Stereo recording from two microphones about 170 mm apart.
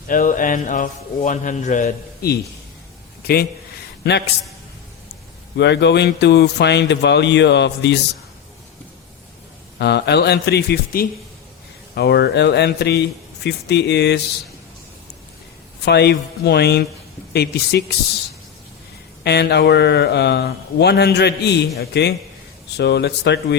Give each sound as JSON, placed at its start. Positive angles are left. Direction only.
{"t": 0.1, "sound": "a man's voice", "side_deg": 50}
{"t": 2.2, "sound": "a man's voice", "side_deg": 65}
{"t": 5.5, "sound": "speech", "side_deg": 90}
{"t": 9.7, "sound": "a man's voice", "side_deg": 80}
{"t": 15.8, "sound": "speech", "side_deg": 75}
{"t": 19.2, "sound": "a man's voice", "side_deg": 75}